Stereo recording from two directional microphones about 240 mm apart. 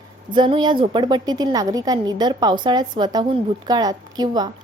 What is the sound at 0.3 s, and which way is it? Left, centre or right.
A woman's voice, centre.